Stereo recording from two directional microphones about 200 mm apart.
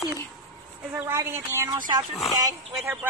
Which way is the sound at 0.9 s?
15° right (ahead or behind).